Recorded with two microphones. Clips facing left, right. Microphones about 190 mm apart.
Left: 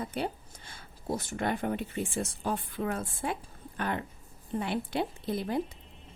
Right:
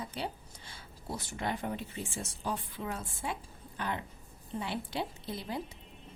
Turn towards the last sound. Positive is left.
turn(degrees=55)  # may be behind; listen again after turning